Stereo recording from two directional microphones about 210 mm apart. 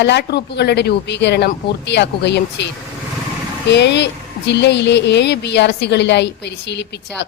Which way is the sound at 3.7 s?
55° left (ahead or behind).